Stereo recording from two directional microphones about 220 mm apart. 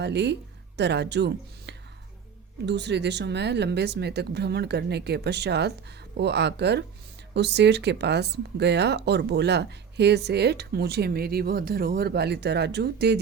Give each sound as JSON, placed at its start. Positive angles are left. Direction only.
{"t": 0.0, "sound": "speech", "side_deg": -50}